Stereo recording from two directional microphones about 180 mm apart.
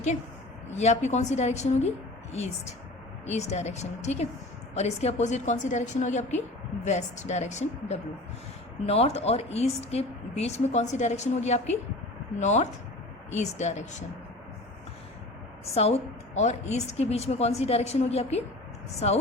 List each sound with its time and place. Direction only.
0.7 s a woman's voice: 40° left (ahead or behind)
3.2 s a woman's voice: 35° left (ahead or behind)
15.7 s a woman's voice: 35° left (ahead or behind)